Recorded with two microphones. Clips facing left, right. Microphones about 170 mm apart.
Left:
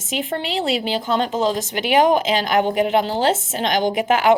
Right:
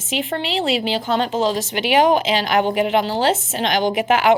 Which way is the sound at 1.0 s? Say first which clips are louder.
Left 1 dB; 45° left (ahead or behind).